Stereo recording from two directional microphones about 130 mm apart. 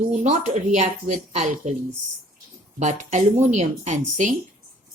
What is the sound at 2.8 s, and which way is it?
Speech, 70° right (ahead or behind).